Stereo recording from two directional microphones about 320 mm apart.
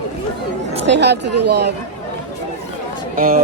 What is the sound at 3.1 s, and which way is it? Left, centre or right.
Speech, right.